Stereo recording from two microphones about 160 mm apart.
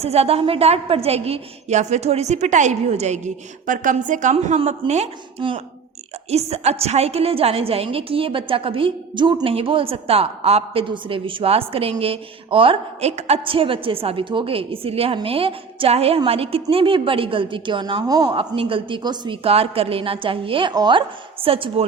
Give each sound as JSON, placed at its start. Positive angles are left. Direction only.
{"t": 0.0, "sound": "a woman's voice", "side_deg": -40}
{"t": 18.3, "sound": "a woman's voice", "side_deg": -35}